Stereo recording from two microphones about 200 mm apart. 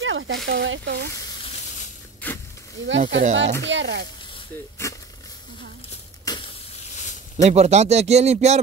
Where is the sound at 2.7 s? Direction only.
65° right (ahead or behind).